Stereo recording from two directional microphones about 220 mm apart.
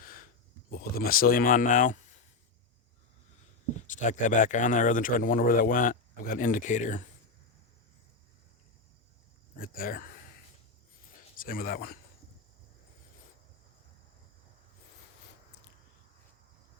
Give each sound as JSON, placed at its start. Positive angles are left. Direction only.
{"t": 0.0, "sound": "a sound", "side_deg": 40}
{"t": 0.7, "sound": "speech", "side_deg": 45}
{"t": 4.0, "sound": "speech", "side_deg": 35}
{"t": 9.6, "sound": "speech", "side_deg": 40}
{"t": 11.3, "sound": "speech", "side_deg": 40}